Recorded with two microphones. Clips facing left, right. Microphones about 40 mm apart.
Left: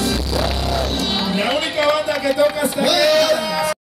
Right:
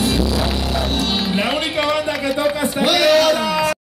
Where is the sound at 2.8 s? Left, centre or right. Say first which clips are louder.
Right 1 dB; right.